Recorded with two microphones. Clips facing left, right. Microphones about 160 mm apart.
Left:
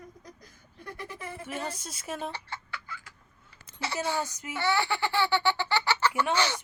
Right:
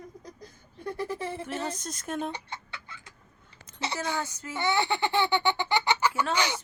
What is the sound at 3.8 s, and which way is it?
Speech, 20° right (ahead or behind).